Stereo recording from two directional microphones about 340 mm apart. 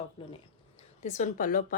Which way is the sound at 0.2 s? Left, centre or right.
Centre.